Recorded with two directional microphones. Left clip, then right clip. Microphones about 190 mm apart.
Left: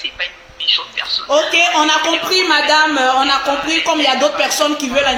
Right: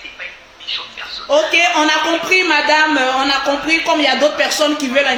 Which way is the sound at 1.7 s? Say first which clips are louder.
Left 1 dB; 10° right (ahead or behind).